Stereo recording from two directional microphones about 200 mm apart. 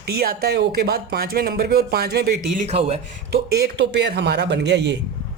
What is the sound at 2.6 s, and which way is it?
Speech, 30° right (ahead or behind).